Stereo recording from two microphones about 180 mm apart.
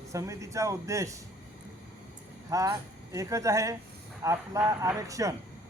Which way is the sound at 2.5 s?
20° right (ahead or behind).